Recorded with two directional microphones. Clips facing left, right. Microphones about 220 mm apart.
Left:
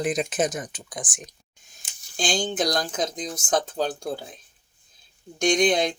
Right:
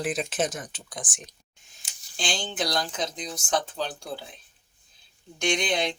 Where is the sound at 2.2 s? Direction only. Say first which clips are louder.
Left 5 dB; 45° left (ahead or behind).